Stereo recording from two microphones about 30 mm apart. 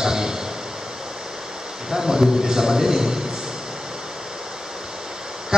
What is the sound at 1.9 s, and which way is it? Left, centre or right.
A man's voice, centre.